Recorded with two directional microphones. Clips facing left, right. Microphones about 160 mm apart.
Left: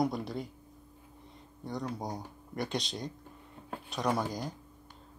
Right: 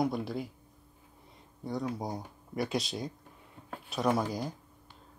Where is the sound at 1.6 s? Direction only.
5° right (ahead or behind).